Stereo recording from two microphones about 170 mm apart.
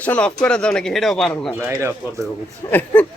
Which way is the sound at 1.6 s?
15° right (ahead or behind).